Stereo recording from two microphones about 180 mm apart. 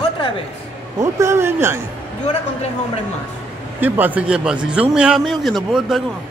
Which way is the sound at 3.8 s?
10° right (ahead or behind).